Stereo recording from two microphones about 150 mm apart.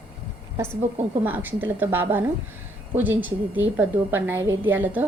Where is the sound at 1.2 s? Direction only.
10° right (ahead or behind).